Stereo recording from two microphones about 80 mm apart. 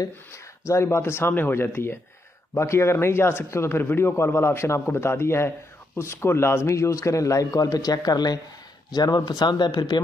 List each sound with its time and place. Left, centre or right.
0.7 s a man's voice: left